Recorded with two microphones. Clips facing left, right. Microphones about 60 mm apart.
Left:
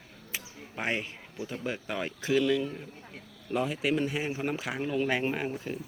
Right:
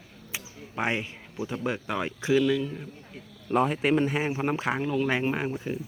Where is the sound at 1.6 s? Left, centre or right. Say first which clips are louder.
Right 4 dB; right.